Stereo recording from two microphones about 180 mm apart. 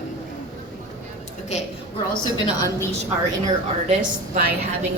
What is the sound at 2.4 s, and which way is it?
Speech, 20° left (ahead or behind).